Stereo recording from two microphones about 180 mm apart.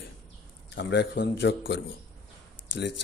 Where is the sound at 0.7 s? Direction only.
80° left.